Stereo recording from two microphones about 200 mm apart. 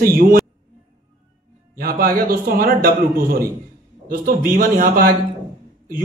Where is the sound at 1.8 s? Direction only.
45° right (ahead or behind).